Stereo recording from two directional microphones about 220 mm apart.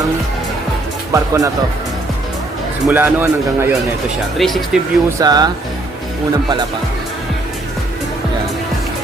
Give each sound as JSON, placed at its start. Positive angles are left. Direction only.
{"t": 1.1, "sound": "speech", "side_deg": -15}
{"t": 2.8, "sound": "speech", "side_deg": -10}
{"t": 5.2, "sound": "speech", "side_deg": -20}